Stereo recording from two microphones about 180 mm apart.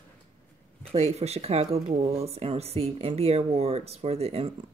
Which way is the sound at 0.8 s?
35° right (ahead or behind).